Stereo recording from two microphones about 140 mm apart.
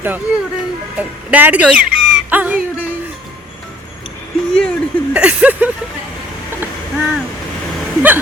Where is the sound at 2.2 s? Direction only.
10° right (ahead or behind).